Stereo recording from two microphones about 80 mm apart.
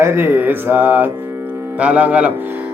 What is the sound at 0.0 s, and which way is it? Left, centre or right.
Speech, right.